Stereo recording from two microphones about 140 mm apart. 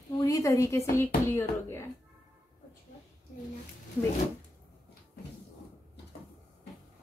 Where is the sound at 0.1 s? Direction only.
20° left (ahead or behind).